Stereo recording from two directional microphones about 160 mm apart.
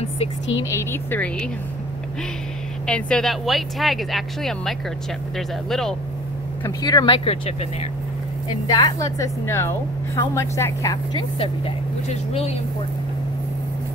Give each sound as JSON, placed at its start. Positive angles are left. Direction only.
{"t": 0.7, "sound": "speech", "side_deg": 15}
{"t": 2.9, "sound": "speech", "side_deg": 5}
{"t": 6.8, "sound": "a woman's voice", "side_deg": 25}
{"t": 8.5, "sound": "a woman's voice", "side_deg": 25}
{"t": 11.3, "sound": "speech", "side_deg": 35}